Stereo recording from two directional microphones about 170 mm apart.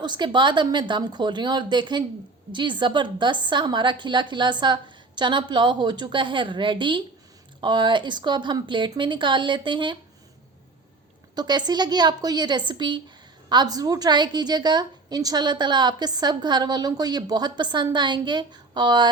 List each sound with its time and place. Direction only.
0.0 s a woman's voice: 25° right (ahead or behind)
11.3 s a woman's voice: 25° right (ahead or behind)